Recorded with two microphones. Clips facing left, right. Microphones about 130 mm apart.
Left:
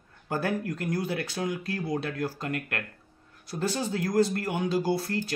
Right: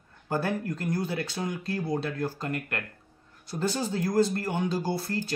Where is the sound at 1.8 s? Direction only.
30° right (ahead or behind).